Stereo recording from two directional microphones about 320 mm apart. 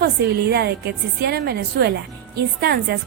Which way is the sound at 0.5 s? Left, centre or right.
Right.